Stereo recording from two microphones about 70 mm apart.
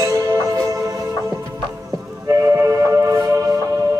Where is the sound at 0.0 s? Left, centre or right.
Right.